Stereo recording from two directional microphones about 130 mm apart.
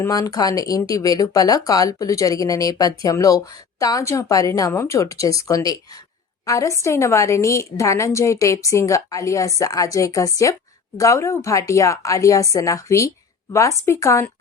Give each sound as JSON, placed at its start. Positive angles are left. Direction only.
{"t": 0.0, "sound": "speech", "side_deg": 25}